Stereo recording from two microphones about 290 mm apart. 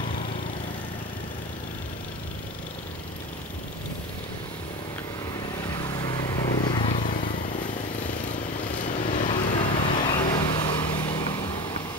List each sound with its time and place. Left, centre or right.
5.9 s vehicle: centre
8.8 s vehicle: left
9.3 s vehicle: centre